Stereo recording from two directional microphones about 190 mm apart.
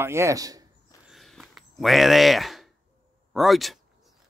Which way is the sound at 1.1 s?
Centre (ahead or behind).